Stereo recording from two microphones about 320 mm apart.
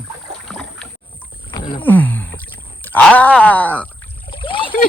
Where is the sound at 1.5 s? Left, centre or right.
Centre.